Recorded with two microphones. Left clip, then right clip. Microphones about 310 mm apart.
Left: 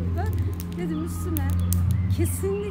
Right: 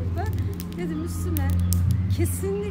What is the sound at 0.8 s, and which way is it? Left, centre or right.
Speech, centre.